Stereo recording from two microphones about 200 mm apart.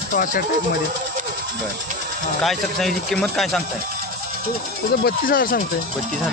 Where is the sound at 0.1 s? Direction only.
40° left (ahead or behind).